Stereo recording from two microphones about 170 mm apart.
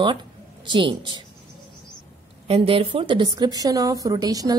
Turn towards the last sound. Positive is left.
turn(degrees=-20)  # may be behind; listen again after turning